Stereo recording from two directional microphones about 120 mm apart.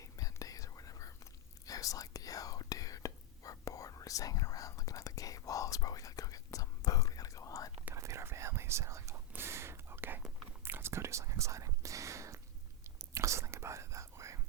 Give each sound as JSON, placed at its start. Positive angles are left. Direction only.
{"t": 0.0, "sound": "whispering", "side_deg": 30}
{"t": 7.9, "sound": "whispering", "side_deg": -25}